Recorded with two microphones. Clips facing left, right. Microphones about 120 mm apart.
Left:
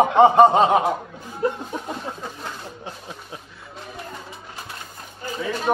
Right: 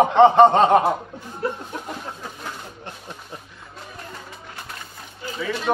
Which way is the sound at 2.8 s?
5° left (ahead or behind).